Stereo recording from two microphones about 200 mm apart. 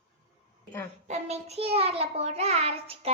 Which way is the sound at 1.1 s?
35° right (ahead or behind).